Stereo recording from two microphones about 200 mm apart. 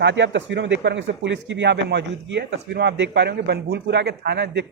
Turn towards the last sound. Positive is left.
turn(degrees=-55)  # may be behind; listen again after turning